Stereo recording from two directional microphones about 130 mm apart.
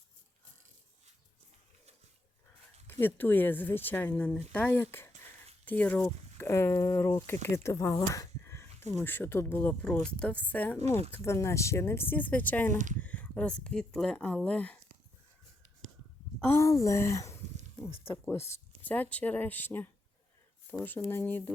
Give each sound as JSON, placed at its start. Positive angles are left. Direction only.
{"t": 2.8, "sound": "a sound", "side_deg": 15}
{"t": 3.2, "sound": "speech", "side_deg": 15}
{"t": 12.7, "sound": "speech", "side_deg": -70}
{"t": 13.0, "sound": "speech", "side_deg": 10}
{"t": 16.4, "sound": "a woman's voice", "side_deg": 20}
{"t": 17.8, "sound": "a sound", "side_deg": 45}
{"t": 18.1, "sound": "a woman's voice", "side_deg": 20}
{"t": 21.1, "sound": "speech", "side_deg": 15}